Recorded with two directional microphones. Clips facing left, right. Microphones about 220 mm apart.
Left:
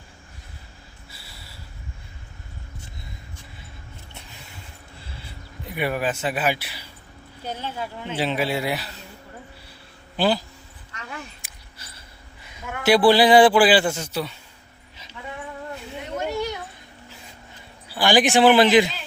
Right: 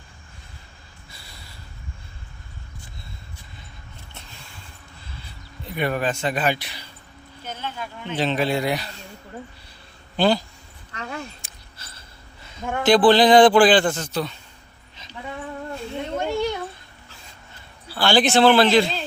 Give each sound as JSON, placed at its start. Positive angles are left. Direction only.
{"t": 1.1, "sound": "snort", "side_deg": 5}
{"t": 5.6, "sound": "a man's voice", "side_deg": 10}
{"t": 7.4, "sound": "speech", "side_deg": 35}
{"t": 8.1, "sound": "a man's voice", "side_deg": 10}
{"t": 10.2, "sound": "speech", "side_deg": 5}
{"t": 10.9, "sound": "a sound", "side_deg": -35}
{"t": 11.4, "sound": "a sound", "side_deg": 15}
{"t": 12.8, "sound": "a man's voice", "side_deg": 10}
{"t": 16.1, "sound": "a sound", "side_deg": -30}
{"t": 17.8, "sound": "a man's voice", "side_deg": 15}